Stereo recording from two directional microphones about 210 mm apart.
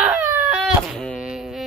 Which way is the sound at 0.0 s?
5° right (ahead or behind).